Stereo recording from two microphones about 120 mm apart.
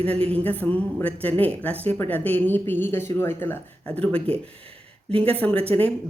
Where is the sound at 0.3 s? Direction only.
15° left (ahead or behind).